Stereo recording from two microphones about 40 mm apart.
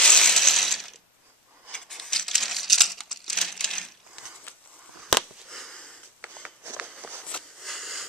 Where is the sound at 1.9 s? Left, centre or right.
Centre.